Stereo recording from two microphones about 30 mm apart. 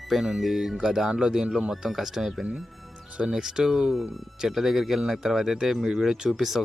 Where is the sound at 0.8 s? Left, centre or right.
Centre.